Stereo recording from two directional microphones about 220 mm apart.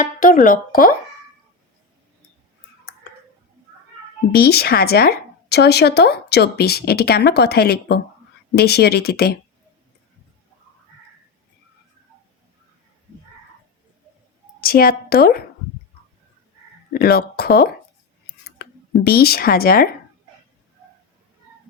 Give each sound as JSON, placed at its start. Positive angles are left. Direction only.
{"t": 0.0, "sound": "speech", "side_deg": 35}
{"t": 4.3, "sound": "speech", "side_deg": 45}
{"t": 14.6, "sound": "speech", "side_deg": 40}
{"t": 16.9, "sound": "speech", "side_deg": 45}
{"t": 18.3, "sound": "a sound", "side_deg": 45}